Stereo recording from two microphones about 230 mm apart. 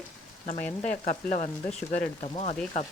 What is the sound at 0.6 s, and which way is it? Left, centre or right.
Frying, centre.